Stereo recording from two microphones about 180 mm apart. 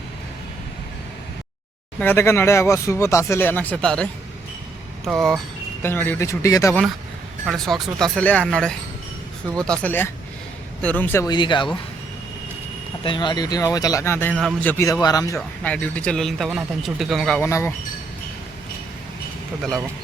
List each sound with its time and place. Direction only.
2.0 s speech: 10° left (ahead or behind)
5.8 s speech: 10° left (ahead or behind)
7.4 s speech: centre (ahead or behind)
11.3 s speech: 25° left (ahead or behind)
13.1 s speech: 25° left (ahead or behind)
15.4 s speech: 10° left (ahead or behind)